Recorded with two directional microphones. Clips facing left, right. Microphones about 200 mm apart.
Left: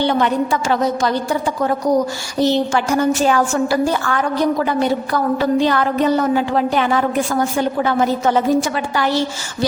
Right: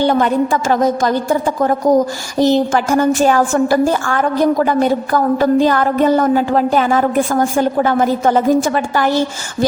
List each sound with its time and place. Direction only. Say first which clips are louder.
0.0 s a woman's voice: right 3 dB; 45° right (ahead or behind)